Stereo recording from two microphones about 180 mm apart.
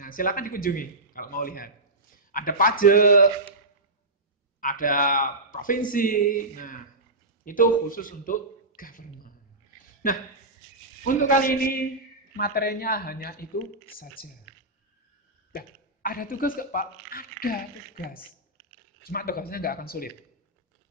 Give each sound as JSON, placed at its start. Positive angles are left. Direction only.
{"t": 0.0, "sound": "a man's voice", "side_deg": 50}
{"t": 4.6, "sound": "a man's voice", "side_deg": 50}
{"t": 11.1, "sound": "a man's voice", "side_deg": 50}
{"t": 15.5, "sound": "speech", "side_deg": 50}
{"t": 19.0, "sound": "speech", "side_deg": 55}